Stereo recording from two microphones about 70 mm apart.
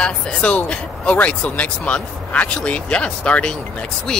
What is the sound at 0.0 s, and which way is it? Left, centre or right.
Speech, centre.